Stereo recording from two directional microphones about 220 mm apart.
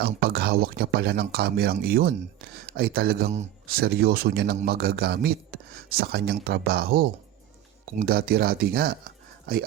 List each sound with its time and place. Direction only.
0.0 s speech: 45° right (ahead or behind)